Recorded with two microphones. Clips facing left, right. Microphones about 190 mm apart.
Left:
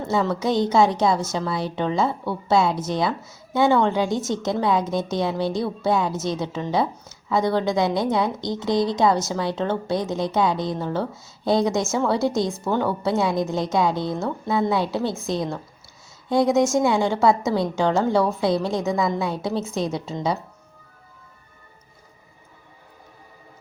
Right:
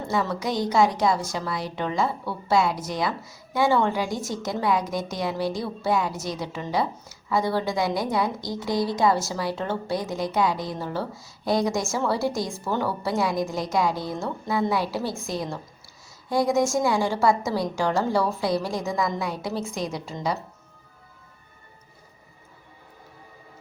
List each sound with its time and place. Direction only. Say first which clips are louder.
0.1 s a woman's voice: left 4 dB; 25° left (ahead or behind)